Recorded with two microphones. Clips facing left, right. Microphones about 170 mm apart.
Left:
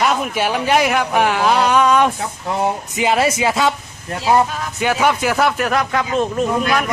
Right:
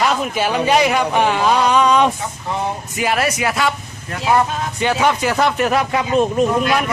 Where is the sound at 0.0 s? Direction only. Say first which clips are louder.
Even; 5° left (ahead or behind).